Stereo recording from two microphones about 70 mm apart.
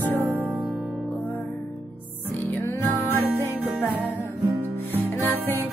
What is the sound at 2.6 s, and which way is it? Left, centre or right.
Music, left.